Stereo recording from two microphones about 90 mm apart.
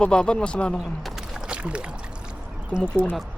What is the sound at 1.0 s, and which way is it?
Music, 10° right (ahead or behind).